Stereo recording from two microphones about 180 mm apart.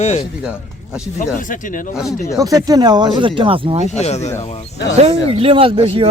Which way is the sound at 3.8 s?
40° left (ahead or behind).